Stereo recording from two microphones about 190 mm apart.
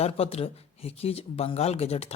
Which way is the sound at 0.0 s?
30° left (ahead or behind).